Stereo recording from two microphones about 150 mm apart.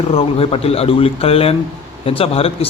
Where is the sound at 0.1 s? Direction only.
40° left (ahead or behind).